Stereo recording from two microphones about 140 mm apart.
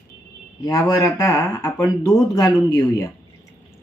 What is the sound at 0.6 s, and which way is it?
Speech, 25° left (ahead or behind).